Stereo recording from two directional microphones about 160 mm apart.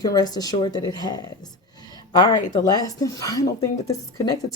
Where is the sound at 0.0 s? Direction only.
25° left (ahead or behind).